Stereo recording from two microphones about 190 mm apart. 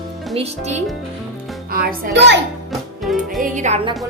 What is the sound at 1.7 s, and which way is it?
Speech, 60° right (ahead or behind).